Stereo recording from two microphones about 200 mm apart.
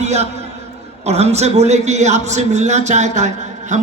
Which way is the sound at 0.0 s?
35° right (ahead or behind).